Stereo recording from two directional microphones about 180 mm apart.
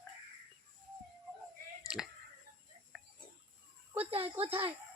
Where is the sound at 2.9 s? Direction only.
Centre (ahead or behind).